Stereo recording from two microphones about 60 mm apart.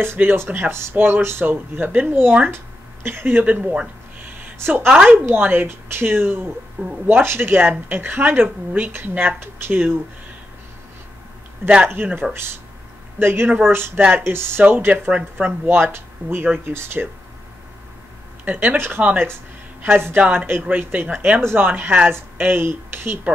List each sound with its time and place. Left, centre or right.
0.0 s speech: right
3.4 s speech: right
4.6 s a woman's voice: right
11.6 s speech: right
12.2 s speech: centre
13.2 s speech: right
14.9 s speech: right
15.8 s speech: right
18.4 s speech: right